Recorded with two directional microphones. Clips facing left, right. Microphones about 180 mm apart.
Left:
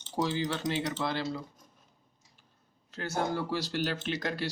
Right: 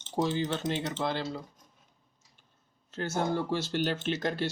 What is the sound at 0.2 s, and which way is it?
Speech, 30° right (ahead or behind).